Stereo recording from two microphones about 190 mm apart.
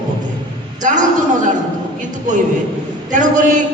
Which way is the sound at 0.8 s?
40° right (ahead or behind).